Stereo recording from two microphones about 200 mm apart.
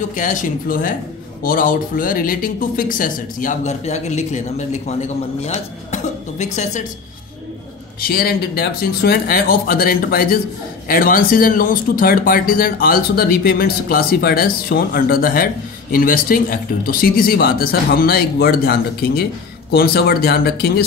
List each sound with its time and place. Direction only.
0.1 s a woman's voice: 40° left (ahead or behind)
8.0 s speech: 50° left (ahead or behind)